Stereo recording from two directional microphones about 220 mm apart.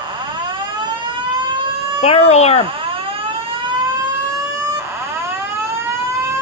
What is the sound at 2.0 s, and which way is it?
Speech, 30° left (ahead or behind).